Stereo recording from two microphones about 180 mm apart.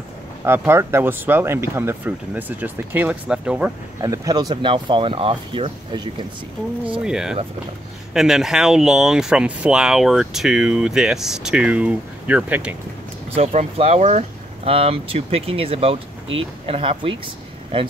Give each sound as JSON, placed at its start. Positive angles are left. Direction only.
{"t": 0.5, "sound": "speech", "side_deg": -15}
{"t": 4.0, "sound": "speech", "side_deg": -20}
{"t": 7.0, "sound": "speech", "side_deg": -5}
{"t": 13.3, "sound": "speech", "side_deg": -35}